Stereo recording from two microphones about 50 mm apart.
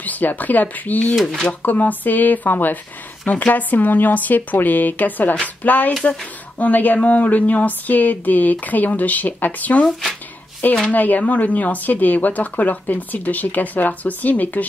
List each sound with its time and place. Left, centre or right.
0.0 s speech: left
10.9 s speech: left